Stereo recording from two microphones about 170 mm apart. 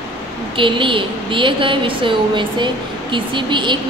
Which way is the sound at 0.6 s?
30° right (ahead or behind).